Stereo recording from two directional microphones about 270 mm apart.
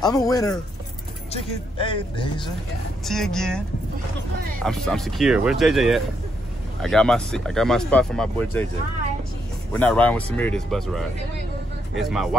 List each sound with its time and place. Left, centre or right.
0.0 s speech: centre
3.1 s speech: centre
9.7 s speech: centre